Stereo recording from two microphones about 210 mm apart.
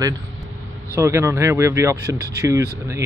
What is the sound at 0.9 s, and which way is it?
Speech, 15° right (ahead or behind).